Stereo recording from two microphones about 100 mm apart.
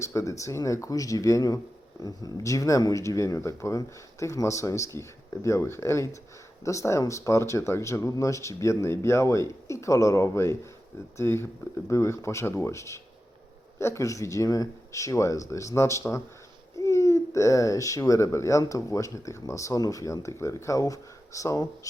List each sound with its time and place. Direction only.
0.0 s speech: 30° left (ahead or behind)